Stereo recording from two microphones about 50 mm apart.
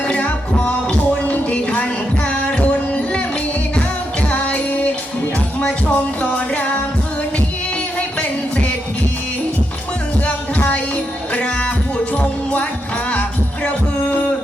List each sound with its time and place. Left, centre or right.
1.2 s music: left
4.3 s music: left
10.2 s music: left
12.1 s music: left
14.0 s a sound: left